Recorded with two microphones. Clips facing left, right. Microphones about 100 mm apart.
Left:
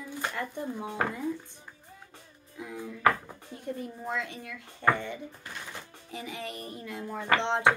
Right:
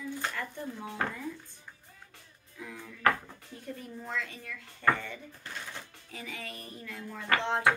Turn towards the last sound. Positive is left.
turn(degrees=25)  # may be behind; listen again after turning